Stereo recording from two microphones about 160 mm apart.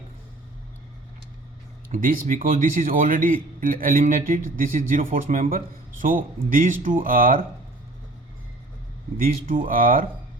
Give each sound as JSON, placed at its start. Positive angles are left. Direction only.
{"t": 1.9, "sound": "a man's voice", "side_deg": -55}
{"t": 9.5, "sound": "a man's voice", "side_deg": -60}